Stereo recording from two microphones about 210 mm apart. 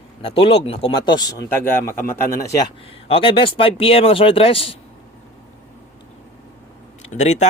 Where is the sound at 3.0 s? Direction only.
25° left (ahead or behind).